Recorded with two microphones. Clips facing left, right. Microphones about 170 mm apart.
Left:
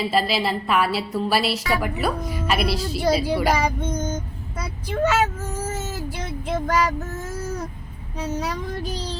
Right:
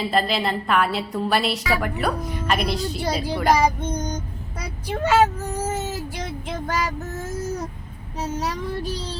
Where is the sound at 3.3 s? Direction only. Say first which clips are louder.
Right 1 dB; 5° left (ahead or behind).